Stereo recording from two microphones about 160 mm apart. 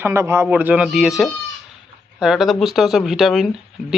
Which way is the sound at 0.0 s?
15° right (ahead or behind).